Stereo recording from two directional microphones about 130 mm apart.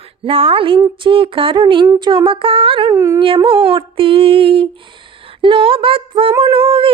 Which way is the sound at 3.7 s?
40° right (ahead or behind).